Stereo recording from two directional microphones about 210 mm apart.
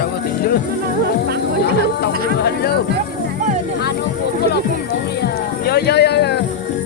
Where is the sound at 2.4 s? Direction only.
50° left (ahead or behind).